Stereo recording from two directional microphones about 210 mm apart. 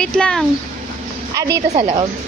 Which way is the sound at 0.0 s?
5° left (ahead or behind).